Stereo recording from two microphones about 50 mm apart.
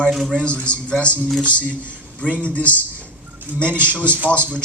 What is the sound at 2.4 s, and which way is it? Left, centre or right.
Speech, left.